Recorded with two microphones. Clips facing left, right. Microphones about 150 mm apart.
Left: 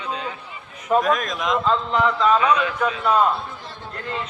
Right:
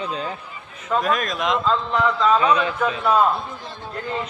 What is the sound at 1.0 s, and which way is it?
Speech, centre (ahead or behind).